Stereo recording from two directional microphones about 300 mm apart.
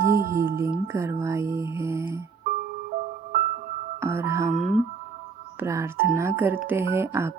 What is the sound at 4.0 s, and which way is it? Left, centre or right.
Speech, centre.